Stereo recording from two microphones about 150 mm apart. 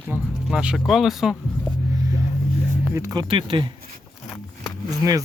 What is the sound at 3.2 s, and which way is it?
Speech, 35° right (ahead or behind).